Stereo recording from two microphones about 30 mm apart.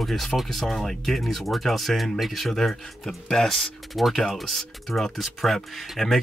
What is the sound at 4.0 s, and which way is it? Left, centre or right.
Speech, centre.